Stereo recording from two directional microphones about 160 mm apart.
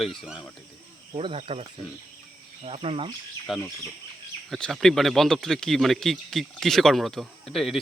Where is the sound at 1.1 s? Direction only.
35° right (ahead or behind).